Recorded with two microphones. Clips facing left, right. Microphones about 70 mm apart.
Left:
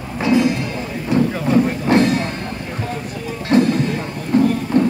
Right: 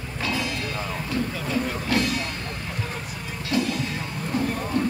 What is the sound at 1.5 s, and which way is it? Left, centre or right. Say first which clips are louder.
Music: left 10 dB; left.